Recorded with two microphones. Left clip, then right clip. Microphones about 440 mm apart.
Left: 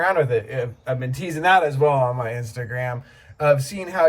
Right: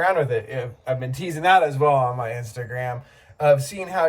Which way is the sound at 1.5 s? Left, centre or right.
Right.